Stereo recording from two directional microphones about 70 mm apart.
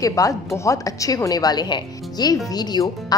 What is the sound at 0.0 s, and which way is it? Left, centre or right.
A woman's voice, left.